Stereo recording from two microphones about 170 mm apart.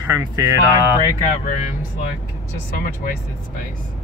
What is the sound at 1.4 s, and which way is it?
Speech, 50° left (ahead or behind).